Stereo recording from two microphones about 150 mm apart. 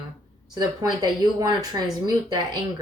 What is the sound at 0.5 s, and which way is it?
Speech, 30° right (ahead or behind).